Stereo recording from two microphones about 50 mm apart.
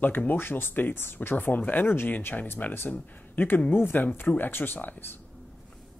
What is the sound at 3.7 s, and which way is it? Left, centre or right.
Speech, left.